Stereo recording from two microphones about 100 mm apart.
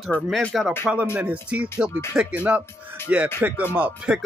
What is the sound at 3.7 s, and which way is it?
Speech, 10° right (ahead or behind).